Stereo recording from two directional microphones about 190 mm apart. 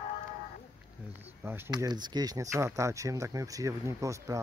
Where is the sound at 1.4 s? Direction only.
10° right (ahead or behind).